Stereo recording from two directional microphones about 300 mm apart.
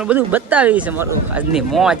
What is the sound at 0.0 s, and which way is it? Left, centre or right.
Speech, centre.